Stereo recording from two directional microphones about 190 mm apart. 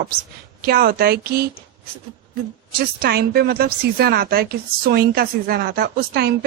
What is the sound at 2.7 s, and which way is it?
A woman's voice, 55° right (ahead or behind).